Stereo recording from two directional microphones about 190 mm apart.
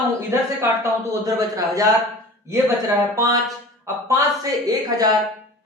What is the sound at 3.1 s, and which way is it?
A man's voice, 20° right (ahead or behind).